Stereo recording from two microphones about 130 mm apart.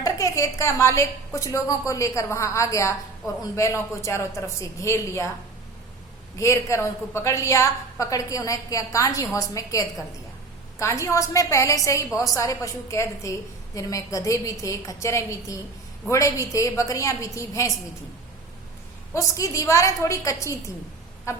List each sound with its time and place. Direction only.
0.0 s a woman's voice: 25° left (ahead or behind)
6.4 s a woman's voice: 25° left (ahead or behind)
19.1 s a woman's voice: 25° left (ahead or behind)
21.3 s a sound: 25° left (ahead or behind)